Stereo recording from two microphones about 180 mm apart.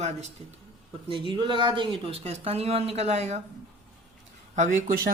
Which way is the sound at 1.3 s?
25° right (ahead or behind).